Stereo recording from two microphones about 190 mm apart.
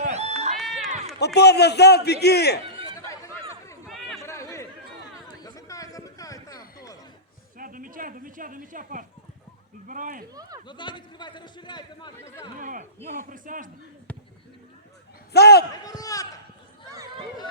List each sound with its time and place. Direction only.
0.0 s run: 35° right (ahead or behind)
0.5 s run: centre (ahead or behind)
1.2 s a man's voice: 60° left (ahead or behind)
3.8 s chatter: centre (ahead or behind)
4.2 s chatter: 15° left (ahead or behind)
7.6 s speech: 45° right (ahead or behind)
10.7 s a man's voice: 25° left (ahead or behind)
12.5 s speech: 45° right (ahead or behind)
14.1 s basketball bounce: 5° left (ahead or behind)
15.3 s a man's voice: 60° left (ahead or behind)
15.8 s a man's voice: 20° left (ahead or behind)
16.9 s a sound: 20° right (ahead or behind)